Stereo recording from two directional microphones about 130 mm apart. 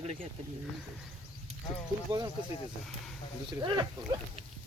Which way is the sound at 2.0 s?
30° right (ahead or behind).